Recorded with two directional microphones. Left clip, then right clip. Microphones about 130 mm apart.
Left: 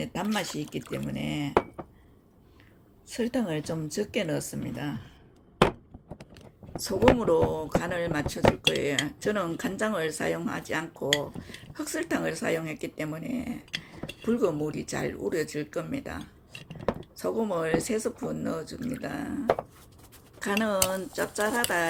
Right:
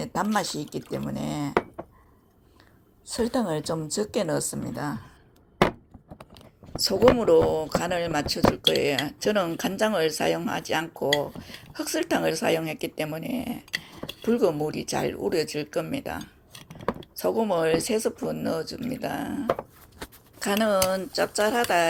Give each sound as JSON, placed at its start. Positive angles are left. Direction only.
{"t": 0.0, "sound": "a sound", "side_deg": -15}
{"t": 0.3, "sound": "speech", "side_deg": -20}
{"t": 3.1, "sound": "a woman's voice", "side_deg": -20}
{"t": 6.7, "sound": "a woman's voice", "side_deg": -15}
{"t": 17.2, "sound": "speech", "side_deg": -20}
{"t": 20.8, "sound": "speech", "side_deg": -5}
{"t": 21.2, "sound": "speech", "side_deg": -20}